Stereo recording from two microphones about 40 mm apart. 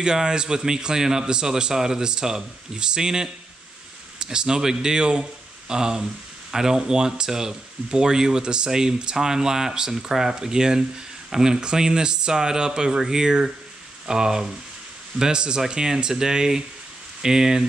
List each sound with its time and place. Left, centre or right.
0.0 s speech: centre